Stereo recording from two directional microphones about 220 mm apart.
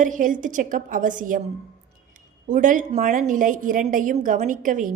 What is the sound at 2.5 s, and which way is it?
A woman's voice, 35° right (ahead or behind).